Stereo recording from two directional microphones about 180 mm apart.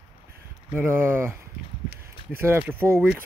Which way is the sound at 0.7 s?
10° right (ahead or behind).